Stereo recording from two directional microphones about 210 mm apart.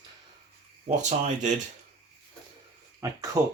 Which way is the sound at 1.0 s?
35° right (ahead or behind).